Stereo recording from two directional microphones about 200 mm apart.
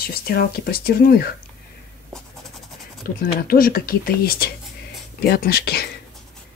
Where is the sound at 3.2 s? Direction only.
45° left (ahead or behind).